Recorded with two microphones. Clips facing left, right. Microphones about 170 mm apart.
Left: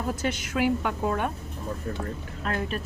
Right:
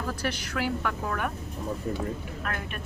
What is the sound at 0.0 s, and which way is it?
A woman's voice, 20° left (ahead or behind).